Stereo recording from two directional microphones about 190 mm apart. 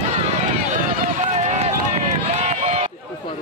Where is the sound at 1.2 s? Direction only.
35° right (ahead or behind).